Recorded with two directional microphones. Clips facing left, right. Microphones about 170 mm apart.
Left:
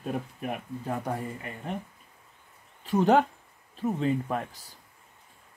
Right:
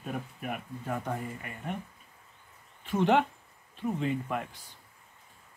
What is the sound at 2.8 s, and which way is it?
Speech, 40° left (ahead or behind).